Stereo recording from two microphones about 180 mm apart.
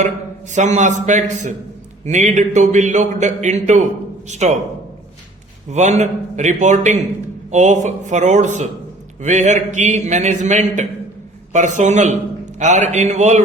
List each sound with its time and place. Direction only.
0.5 s a man's voice: 40° right (ahead or behind)
5.7 s a man's voice: 40° right (ahead or behind)